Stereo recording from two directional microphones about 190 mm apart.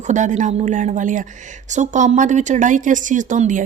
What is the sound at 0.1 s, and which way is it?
A woman's voice, 40° right (ahead or behind).